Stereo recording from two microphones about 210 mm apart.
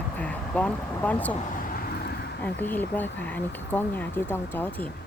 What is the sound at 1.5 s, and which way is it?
Vehicle, 45° left (ahead or behind).